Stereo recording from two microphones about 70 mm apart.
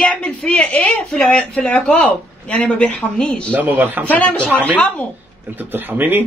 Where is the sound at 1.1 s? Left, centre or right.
Centre.